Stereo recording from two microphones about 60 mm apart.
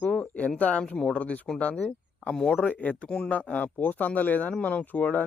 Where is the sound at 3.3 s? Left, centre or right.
Left.